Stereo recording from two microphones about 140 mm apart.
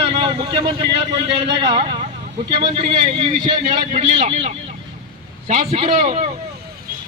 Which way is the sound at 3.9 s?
55° right (ahead or behind).